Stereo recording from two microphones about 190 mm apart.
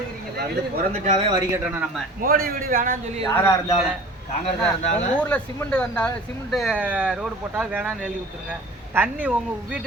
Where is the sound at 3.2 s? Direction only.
15° left (ahead or behind).